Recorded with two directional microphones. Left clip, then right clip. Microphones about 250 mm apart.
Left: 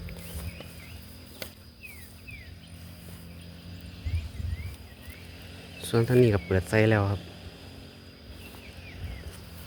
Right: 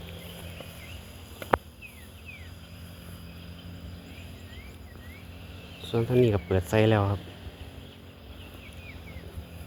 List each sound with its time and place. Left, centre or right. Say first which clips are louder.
5.8 s speech: left 2 dB; left; by 7.2 s centre